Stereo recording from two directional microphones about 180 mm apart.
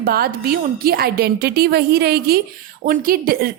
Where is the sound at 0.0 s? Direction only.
55° right (ahead or behind).